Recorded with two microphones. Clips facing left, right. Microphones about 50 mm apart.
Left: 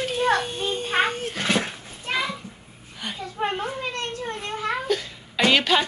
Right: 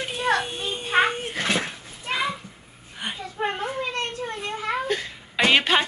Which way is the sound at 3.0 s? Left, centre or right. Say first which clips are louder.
Right 1 dB; right.